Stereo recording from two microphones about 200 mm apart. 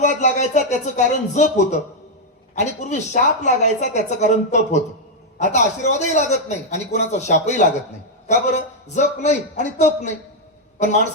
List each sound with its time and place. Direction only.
0.0 s speech: 35° left (ahead or behind)